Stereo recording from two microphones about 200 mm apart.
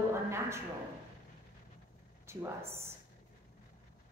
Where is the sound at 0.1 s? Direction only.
15° right (ahead or behind).